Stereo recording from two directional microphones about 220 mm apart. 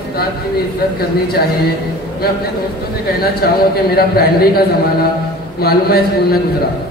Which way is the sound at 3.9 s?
45° left (ahead or behind).